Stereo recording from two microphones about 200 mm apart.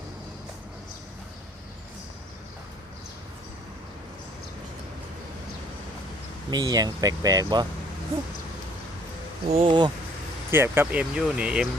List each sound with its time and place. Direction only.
6.5 s speech: 20° right (ahead or behind)
9.5 s speech: 30° right (ahead or behind)
10.5 s speech: 10° right (ahead or behind)